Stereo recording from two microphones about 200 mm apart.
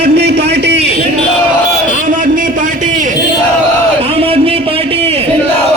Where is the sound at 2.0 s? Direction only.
45° right (ahead or behind).